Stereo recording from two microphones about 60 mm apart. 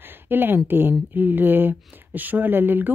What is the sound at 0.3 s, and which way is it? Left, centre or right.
Speech, right.